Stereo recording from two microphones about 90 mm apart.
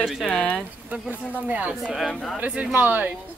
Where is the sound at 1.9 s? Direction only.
Centre (ahead or behind).